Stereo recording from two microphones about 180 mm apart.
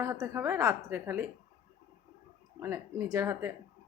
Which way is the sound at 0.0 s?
15° right (ahead or behind).